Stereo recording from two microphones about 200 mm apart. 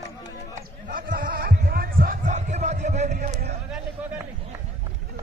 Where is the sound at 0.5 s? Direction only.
45° right (ahead or behind).